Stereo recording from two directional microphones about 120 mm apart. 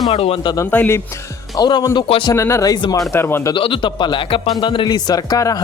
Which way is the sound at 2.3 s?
25° left (ahead or behind).